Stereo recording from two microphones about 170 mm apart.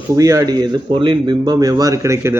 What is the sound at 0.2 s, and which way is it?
Speech, 20° right (ahead or behind).